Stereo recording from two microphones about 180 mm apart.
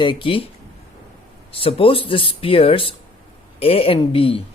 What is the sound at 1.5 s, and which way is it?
Speech, 30° left (ahead or behind).